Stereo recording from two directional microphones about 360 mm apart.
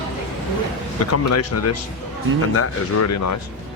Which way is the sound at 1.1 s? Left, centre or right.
Left.